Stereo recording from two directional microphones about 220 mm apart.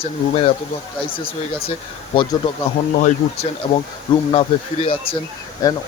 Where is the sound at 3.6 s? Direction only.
30° left (ahead or behind).